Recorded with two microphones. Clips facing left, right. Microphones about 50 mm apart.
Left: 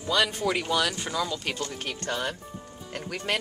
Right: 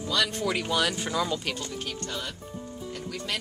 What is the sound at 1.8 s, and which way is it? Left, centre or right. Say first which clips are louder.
Speech: left 4 dB; left.